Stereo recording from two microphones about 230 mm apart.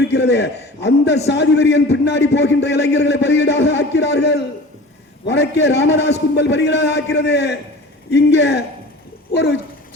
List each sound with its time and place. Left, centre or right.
0.1 s a man's voice: left